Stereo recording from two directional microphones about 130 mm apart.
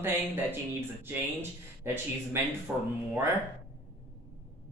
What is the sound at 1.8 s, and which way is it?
Speech, 20° right (ahead or behind).